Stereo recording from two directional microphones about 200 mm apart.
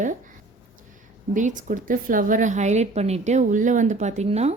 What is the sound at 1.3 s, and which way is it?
A woman's voice, 40° right (ahead or behind).